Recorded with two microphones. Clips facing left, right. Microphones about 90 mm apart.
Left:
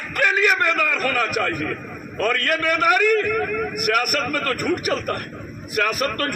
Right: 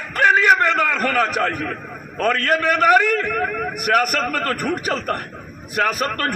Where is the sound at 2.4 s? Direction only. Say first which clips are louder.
Right 5 dB; 40° right (ahead or behind).